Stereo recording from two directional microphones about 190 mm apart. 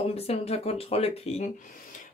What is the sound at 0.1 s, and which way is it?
Speech, 30° left (ahead or behind).